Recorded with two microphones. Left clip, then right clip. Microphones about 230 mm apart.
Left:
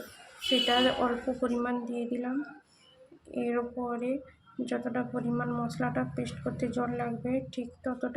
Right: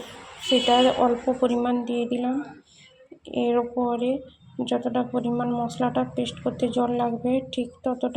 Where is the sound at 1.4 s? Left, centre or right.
Centre.